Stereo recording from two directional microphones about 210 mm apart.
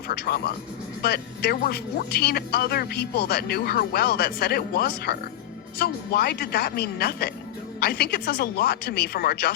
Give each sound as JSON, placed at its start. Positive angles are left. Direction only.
{"t": 0.1, "sound": "speech", "side_deg": 50}